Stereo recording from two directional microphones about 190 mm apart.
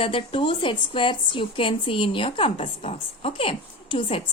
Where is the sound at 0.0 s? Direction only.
30° left (ahead or behind).